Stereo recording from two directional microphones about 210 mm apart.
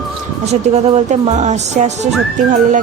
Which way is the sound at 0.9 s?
35° right (ahead or behind).